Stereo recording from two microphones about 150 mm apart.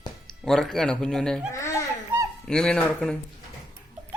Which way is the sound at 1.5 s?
20° left (ahead or behind).